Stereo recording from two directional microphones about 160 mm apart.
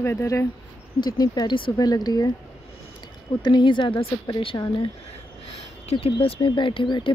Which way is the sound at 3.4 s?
30° left (ahead or behind).